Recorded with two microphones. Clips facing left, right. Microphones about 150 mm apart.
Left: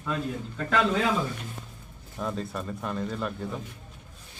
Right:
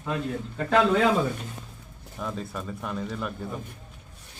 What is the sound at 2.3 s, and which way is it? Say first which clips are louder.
Speech: left 1 dB; centre (ahead or behind).